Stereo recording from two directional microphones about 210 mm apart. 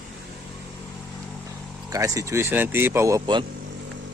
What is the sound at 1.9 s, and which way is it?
Speech, 15° right (ahead or behind).